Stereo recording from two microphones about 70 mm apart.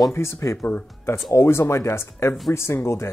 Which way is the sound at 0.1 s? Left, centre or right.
Left.